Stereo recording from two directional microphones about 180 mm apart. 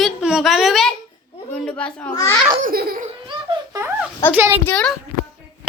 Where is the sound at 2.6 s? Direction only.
55° right (ahead or behind).